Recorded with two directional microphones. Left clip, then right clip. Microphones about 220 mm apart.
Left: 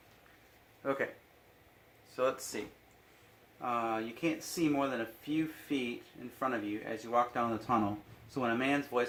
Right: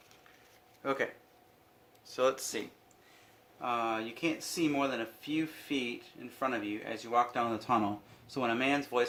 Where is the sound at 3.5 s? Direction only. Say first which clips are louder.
Right 1 dB; 10° right (ahead or behind).